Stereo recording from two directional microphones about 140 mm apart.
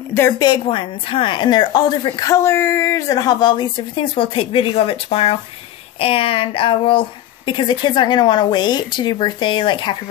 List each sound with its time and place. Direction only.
0.4 s a woman's voice: 35° left (ahead or behind)